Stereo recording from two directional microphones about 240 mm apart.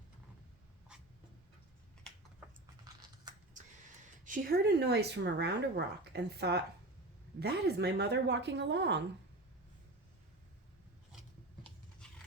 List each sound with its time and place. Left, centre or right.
2.9 s typing: centre
4.3 s speech: right